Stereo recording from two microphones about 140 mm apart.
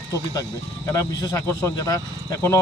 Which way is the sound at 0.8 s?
25° left (ahead or behind).